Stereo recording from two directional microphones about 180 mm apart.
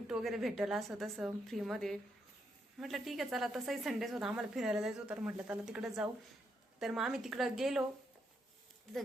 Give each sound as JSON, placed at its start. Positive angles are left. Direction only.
{"t": 0.1, "sound": "a woman's voice", "side_deg": 0}